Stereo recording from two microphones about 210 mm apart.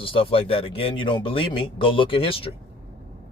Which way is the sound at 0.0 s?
25° left (ahead or behind).